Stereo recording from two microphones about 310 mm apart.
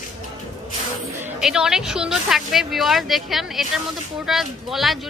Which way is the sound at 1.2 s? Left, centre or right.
Centre.